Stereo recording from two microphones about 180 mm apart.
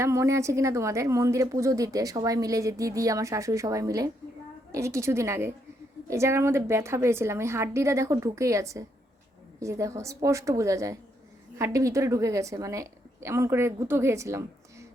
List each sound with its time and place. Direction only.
0.0 s a woman's voice: 15° right (ahead or behind)